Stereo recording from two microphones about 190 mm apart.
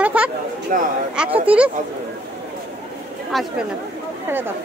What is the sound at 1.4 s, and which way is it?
Speech, 5° right (ahead or behind).